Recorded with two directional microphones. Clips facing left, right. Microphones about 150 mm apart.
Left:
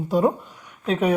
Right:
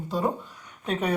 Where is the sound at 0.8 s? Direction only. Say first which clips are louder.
Left 6 dB; centre (ahead or behind).